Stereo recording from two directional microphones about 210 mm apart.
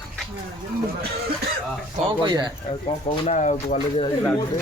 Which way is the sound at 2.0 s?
20° right (ahead or behind).